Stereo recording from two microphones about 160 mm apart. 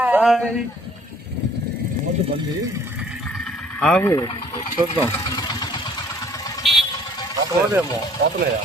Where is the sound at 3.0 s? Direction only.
Centre (ahead or behind).